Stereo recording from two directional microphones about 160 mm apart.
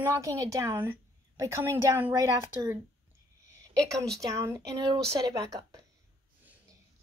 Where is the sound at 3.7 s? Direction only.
5° left (ahead or behind).